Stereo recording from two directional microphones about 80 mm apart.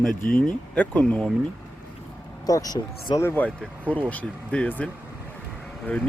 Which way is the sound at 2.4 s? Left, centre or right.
Left.